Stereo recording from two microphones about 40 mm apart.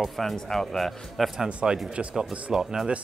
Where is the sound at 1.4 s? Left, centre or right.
Right.